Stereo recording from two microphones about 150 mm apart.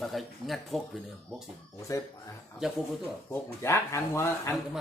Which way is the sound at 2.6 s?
5° right (ahead or behind).